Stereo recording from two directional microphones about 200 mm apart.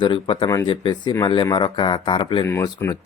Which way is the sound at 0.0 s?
25° left (ahead or behind).